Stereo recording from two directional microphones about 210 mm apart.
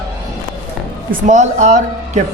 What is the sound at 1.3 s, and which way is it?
Speech, 35° right (ahead or behind).